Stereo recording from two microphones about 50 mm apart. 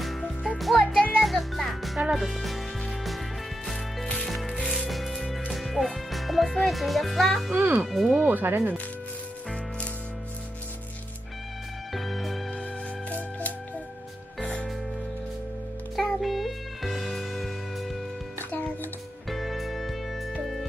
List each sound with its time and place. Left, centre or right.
0.0 s music: centre
4.6 s music: centre
4.9 s music: centre
7.6 s speech: right
7.9 s speech: centre
8.2 s speech: right
8.4 s speech: right
11.9 s music: centre
13.1 s music: left
16.0 s music: centre
19.3 s music: centre